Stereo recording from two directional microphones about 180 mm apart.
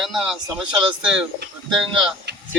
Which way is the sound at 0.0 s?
Centre (ahead or behind).